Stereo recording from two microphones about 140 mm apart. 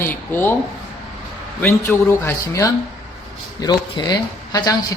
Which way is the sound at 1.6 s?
15° left (ahead or behind).